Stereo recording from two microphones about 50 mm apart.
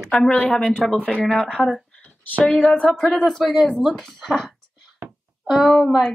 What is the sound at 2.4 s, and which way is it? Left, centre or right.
Speech, centre.